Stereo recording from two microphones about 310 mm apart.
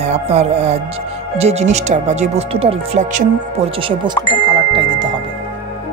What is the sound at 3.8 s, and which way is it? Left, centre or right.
Glockenspiel, centre.